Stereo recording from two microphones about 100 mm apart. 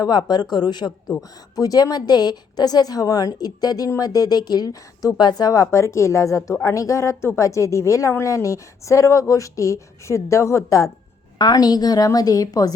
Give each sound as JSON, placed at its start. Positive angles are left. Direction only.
{"t": 0.0, "sound": "a woman's voice", "side_deg": 45}